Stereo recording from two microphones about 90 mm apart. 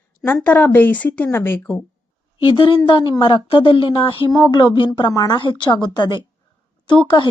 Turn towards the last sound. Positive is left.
turn(degrees=60)  # may be behind; listen again after turning